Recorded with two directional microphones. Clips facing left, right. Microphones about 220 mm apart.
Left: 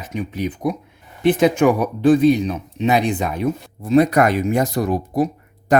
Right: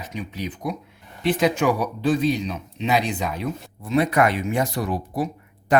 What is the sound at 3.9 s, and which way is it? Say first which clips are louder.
Speech: left 5 dB; 40° left (ahead or behind).